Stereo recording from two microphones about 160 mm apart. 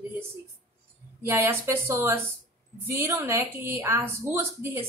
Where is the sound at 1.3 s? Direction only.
15° right (ahead or behind).